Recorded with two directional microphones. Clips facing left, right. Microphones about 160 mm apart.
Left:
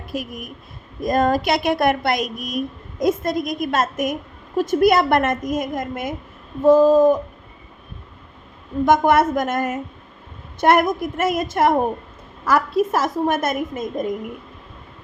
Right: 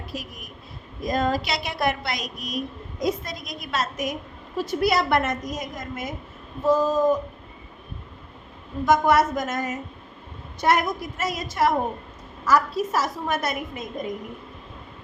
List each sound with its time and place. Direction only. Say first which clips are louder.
0.1 s a woman's voice: left 11 dB; 50° left (ahead or behind)
8.9 s a woman's voice: left 3 dB; 55° left (ahead or behind)